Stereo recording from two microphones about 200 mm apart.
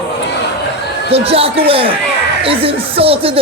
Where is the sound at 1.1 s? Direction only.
30° right (ahead or behind).